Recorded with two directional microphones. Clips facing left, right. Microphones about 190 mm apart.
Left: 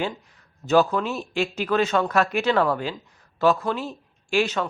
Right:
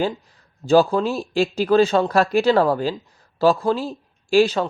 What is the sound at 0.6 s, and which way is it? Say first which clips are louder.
Speech: right 4 dB; 30° right (ahead or behind).